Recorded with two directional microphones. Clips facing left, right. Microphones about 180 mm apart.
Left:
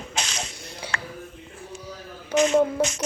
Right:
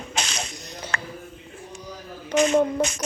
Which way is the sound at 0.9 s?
55° right (ahead or behind).